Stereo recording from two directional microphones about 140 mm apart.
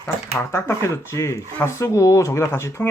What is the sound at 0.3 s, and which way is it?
Speech, 20° left (ahead or behind).